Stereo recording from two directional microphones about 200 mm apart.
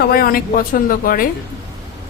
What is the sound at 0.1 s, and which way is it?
Speech, 45° left (ahead or behind).